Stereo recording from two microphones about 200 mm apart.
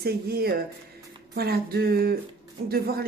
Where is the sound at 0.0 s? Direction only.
50° right (ahead or behind).